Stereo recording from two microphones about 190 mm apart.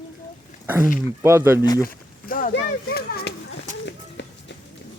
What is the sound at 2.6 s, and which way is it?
Speech, 55° left (ahead or behind).